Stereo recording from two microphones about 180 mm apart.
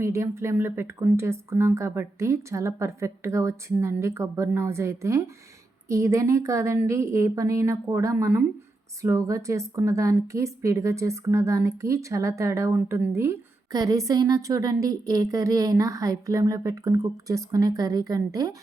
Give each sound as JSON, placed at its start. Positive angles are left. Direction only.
{"t": 0.0, "sound": "a woman's voice", "side_deg": -15}